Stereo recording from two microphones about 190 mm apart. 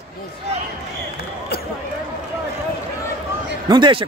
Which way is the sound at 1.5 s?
55° left (ahead or behind).